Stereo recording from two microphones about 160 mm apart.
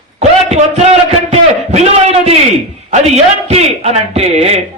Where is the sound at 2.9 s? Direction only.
45° right (ahead or behind).